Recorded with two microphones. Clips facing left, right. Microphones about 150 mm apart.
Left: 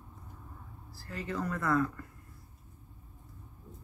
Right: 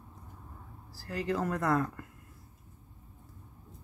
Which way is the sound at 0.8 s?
85° right.